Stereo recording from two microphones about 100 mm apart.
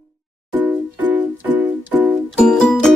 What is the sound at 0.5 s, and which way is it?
Music, 20° right (ahead or behind).